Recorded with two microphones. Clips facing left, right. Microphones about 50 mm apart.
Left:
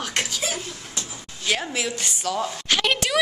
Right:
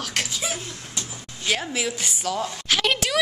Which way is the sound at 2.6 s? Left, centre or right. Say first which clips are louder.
Even; centre.